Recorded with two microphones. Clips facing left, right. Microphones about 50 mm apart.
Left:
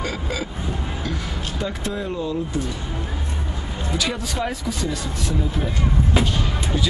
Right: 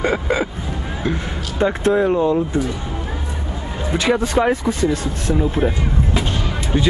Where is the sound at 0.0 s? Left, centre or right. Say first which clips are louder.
Right 8 dB; right.